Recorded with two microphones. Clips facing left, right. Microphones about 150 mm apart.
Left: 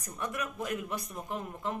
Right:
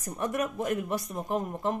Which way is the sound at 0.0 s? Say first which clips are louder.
Right 7 dB; 40° right (ahead or behind).